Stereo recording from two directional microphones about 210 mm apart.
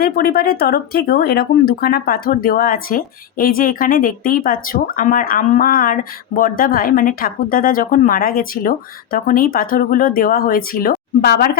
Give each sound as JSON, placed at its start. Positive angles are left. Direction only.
{"t": 0.0, "sound": "speech", "side_deg": 45}